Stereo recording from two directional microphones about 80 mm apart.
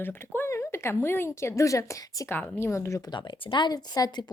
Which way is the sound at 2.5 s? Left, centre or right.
Left.